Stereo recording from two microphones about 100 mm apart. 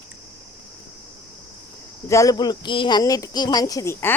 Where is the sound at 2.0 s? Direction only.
30° left (ahead or behind); by 3.0 s 55° left (ahead or behind).